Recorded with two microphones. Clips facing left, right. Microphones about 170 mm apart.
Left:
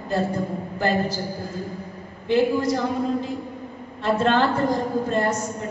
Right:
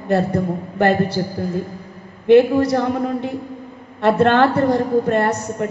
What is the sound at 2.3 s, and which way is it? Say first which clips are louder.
A woman's voice: right 8 dB; 65° right (ahead or behind).